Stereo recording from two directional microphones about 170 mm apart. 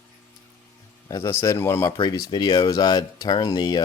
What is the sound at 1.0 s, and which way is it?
Speech, 20° left (ahead or behind).